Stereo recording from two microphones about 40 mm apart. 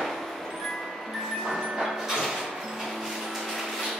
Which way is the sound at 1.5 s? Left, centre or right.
Centre.